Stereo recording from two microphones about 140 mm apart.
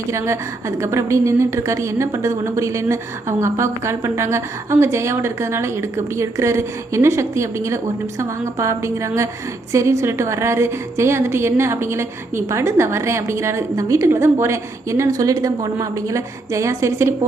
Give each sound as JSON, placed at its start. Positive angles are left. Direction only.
{"t": 0.1, "sound": "a woman's voice", "side_deg": -20}